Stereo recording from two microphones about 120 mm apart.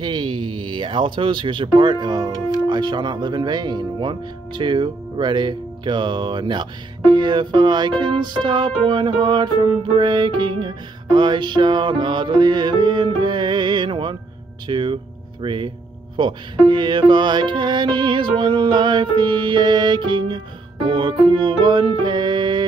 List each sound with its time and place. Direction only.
0.0 s speech: 45° right (ahead or behind)